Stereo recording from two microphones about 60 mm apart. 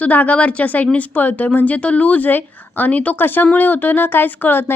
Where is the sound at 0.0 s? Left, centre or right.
Left.